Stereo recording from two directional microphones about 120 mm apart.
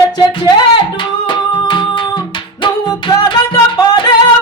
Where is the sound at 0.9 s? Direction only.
45° left (ahead or behind).